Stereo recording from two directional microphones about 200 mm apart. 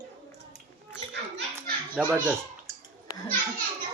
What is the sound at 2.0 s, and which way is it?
Speech, 5° right (ahead or behind).